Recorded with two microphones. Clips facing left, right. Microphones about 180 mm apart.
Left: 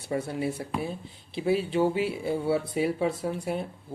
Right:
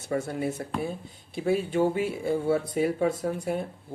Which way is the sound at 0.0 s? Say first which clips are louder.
Right 1 dB; 45° right (ahead or behind).